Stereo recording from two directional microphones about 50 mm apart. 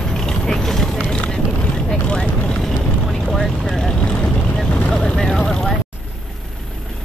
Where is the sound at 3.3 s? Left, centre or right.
Centre.